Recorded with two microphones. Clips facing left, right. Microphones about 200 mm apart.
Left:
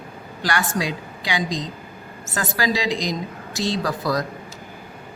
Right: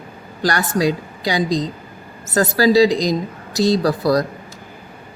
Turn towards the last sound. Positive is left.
turn(degrees=-35)  # may be behind; listen again after turning